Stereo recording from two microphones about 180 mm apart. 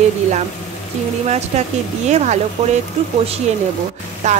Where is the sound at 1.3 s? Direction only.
40° right (ahead or behind).